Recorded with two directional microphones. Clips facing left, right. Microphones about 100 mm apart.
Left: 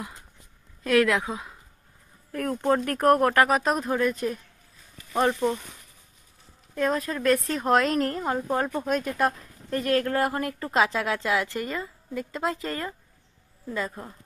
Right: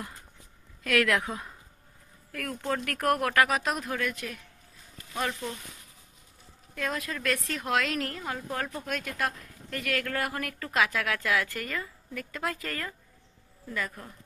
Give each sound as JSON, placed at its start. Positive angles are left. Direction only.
{"t": 0.8, "sound": "speech", "side_deg": 30}
{"t": 1.1, "sound": "speech", "side_deg": 15}
{"t": 2.3, "sound": "speech", "side_deg": 35}
{"t": 6.8, "sound": "speech", "side_deg": 40}
{"t": 8.5, "sound": "speech", "side_deg": 25}